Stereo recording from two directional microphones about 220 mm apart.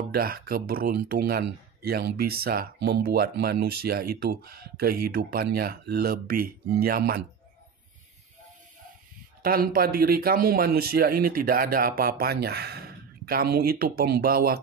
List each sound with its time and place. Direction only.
0.1 s speech: 40° right (ahead or behind)
9.4 s speech: 40° right (ahead or behind)